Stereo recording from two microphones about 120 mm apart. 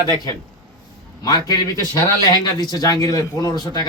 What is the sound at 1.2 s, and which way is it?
Speech, 35° left (ahead or behind).